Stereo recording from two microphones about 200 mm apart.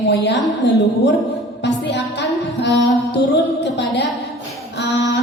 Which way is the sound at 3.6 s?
60° left (ahead or behind).